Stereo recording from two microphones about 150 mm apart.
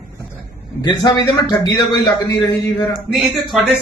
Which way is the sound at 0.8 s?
30° left (ahead or behind).